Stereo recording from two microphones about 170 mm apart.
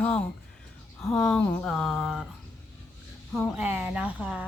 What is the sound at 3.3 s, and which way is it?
Speech, 5° right (ahead or behind).